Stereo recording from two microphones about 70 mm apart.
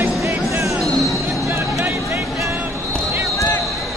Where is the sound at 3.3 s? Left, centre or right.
Left.